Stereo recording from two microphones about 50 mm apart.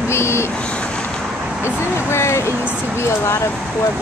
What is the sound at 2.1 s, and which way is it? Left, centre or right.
Speech, left.